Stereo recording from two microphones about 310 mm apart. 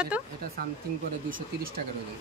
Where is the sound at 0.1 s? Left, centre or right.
Centre.